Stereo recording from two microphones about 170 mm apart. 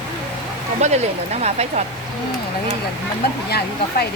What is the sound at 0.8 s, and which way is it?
Speech, 40° right (ahead or behind).